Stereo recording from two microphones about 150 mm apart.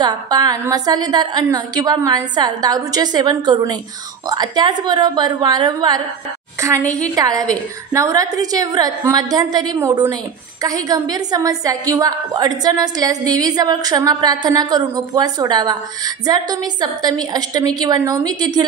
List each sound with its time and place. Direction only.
0.0 s a woman's voice: 25° right (ahead or behind)